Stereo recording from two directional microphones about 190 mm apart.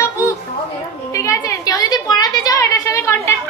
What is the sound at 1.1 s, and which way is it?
A woman's voice, 15° left (ahead or behind).